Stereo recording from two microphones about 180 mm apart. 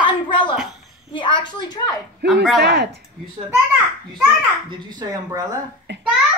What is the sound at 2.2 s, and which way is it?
Speech, 70° right (ahead or behind).